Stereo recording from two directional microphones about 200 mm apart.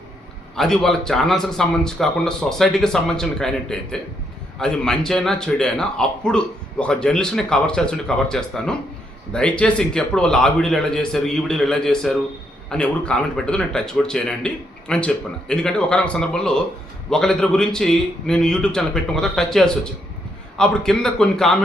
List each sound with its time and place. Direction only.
0.5 s a man's voice: centre (ahead or behind)